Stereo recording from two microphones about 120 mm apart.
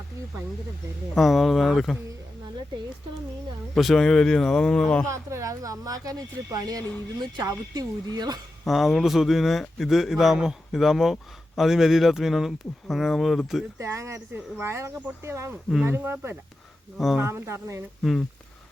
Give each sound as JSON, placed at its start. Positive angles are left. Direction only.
{"t": 1.1, "sound": "speech", "side_deg": 0}
{"t": 3.8, "sound": "speech", "side_deg": 0}
{"t": 5.0, "sound": "speech", "side_deg": -25}
{"t": 8.6, "sound": "speech", "side_deg": 0}
{"t": 13.7, "sound": "speech", "side_deg": -25}